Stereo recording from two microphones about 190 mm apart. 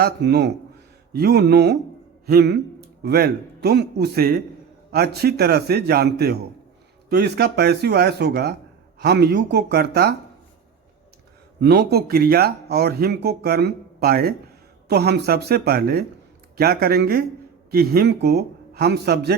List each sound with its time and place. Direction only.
0.0 s speech: 60° right (ahead or behind)
11.6 s speech: 60° right (ahead or behind)